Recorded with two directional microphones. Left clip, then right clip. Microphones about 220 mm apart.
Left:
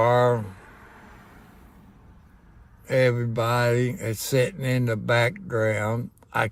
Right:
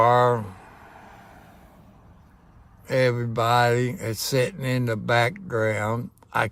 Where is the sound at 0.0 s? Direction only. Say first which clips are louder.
Right 2 dB; 5° right (ahead or behind).